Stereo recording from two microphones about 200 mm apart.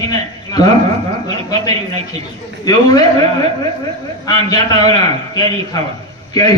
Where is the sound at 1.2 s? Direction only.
20° left (ahead or behind).